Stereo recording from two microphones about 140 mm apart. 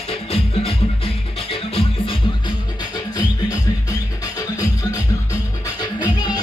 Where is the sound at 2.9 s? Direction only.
25° left (ahead or behind).